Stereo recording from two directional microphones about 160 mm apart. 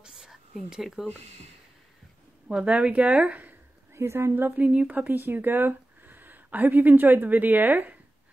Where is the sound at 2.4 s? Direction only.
5° right (ahead or behind).